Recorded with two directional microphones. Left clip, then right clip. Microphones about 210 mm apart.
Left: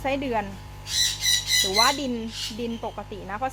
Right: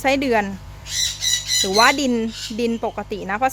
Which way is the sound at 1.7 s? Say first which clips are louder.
Right 6 dB; 55° right (ahead or behind).